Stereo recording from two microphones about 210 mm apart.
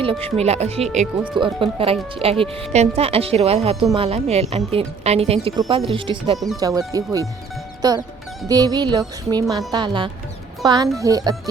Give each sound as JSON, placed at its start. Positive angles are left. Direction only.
{"t": 0.0, "sound": "speech", "side_deg": -25}